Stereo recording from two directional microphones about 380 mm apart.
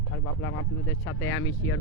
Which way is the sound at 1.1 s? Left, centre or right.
Left.